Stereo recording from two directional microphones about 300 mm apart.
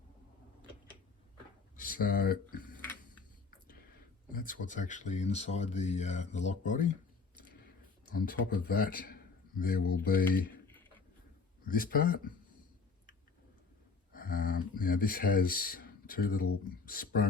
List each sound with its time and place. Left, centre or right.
1.7 s speech: left
4.3 s speech: left
8.1 s a man's voice: left
11.6 s speech: left
14.1 s speech: left